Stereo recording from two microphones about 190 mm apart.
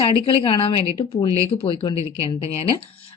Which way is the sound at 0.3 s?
30° left (ahead or behind).